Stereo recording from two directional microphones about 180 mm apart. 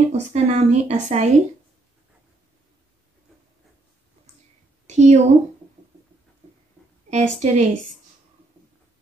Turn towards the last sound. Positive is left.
turn(degrees=-40)  # may be behind; listen again after turning